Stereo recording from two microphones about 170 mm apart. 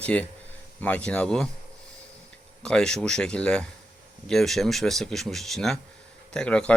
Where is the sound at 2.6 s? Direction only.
5° left (ahead or behind).